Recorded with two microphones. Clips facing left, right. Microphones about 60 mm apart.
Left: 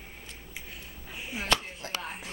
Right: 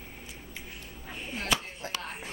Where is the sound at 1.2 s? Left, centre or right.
Centre.